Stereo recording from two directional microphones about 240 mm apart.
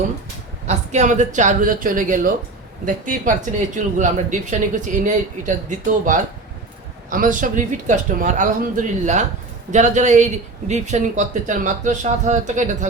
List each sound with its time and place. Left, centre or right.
0.7 s a man's voice: right